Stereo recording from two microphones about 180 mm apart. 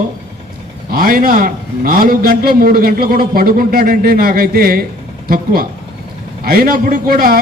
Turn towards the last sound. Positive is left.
turn(degrees=-55)  # may be behind; listen again after turning